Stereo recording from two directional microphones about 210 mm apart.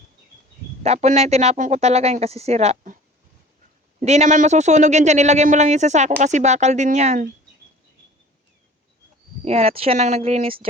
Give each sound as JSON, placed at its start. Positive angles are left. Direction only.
{"t": 0.8, "sound": "speech", "side_deg": -30}
{"t": 4.0, "sound": "speech", "side_deg": -30}
{"t": 9.4, "sound": "speech", "side_deg": -30}